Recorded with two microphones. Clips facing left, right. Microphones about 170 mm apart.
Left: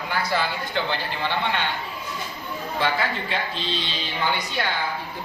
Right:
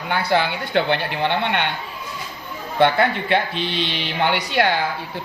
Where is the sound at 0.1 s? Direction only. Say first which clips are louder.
Right 6 dB; 65° right (ahead or behind).